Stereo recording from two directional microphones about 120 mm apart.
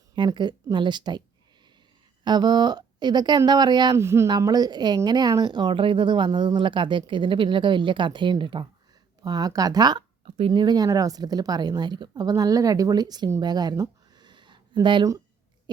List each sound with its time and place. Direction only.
0.2 s speech: 40° right (ahead or behind)
2.2 s speech: 35° right (ahead or behind)
3.9 s speech: 20° right (ahead or behind)
4.3 s speech: 35° right (ahead or behind)
10.2 s speech: 55° right (ahead or behind)
10.5 s speech: 35° right (ahead or behind)
13.4 s a sound: 35° right (ahead or behind)